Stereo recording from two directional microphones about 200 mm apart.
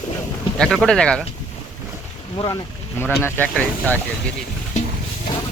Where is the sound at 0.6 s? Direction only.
5° left (ahead or behind).